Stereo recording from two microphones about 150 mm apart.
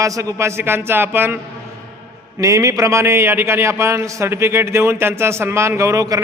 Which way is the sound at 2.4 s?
20° right (ahead or behind).